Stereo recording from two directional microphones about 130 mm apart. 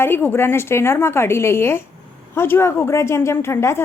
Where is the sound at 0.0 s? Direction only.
15° left (ahead or behind).